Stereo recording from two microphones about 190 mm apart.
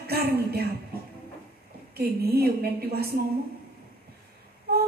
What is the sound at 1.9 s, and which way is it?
A woman's voice, 55° right (ahead or behind).